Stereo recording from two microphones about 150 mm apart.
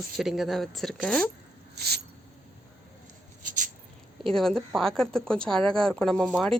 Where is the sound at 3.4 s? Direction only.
60° right (ahead or behind).